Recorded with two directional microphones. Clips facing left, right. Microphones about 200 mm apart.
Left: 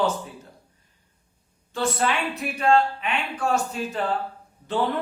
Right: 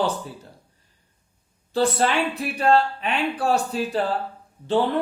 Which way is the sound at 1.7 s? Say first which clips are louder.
Right 4 dB; 35° right (ahead or behind).